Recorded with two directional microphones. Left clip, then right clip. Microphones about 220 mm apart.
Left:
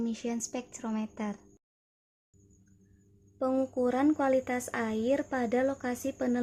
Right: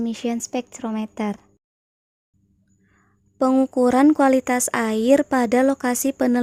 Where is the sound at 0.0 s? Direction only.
35° right (ahead or behind).